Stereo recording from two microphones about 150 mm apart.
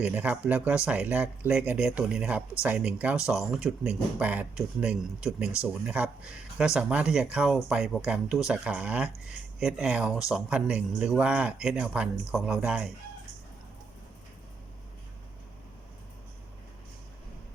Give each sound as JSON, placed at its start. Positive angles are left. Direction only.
{"t": 0.0, "sound": "speech", "side_deg": -10}